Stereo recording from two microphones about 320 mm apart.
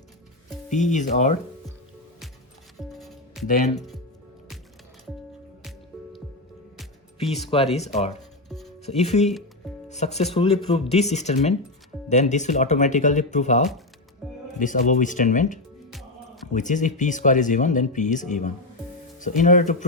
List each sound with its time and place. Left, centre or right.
0.7 s speech: left
2.9 s music: centre
3.4 s speech: left
7.3 s speech: centre
7.9 s speech: centre
8.4 s music: centre
8.8 s speech: centre
15.9 s music: centre
16.5 s speech: left